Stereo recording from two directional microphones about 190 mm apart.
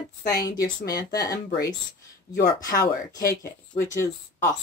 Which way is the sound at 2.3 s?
50° left (ahead or behind).